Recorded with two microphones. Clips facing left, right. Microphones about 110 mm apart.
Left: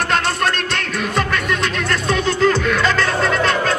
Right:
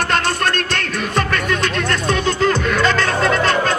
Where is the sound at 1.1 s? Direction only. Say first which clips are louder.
Right 1 dB; 5° left (ahead or behind).